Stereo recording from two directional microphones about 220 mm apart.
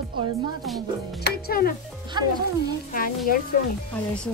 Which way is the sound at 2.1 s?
20° right (ahead or behind).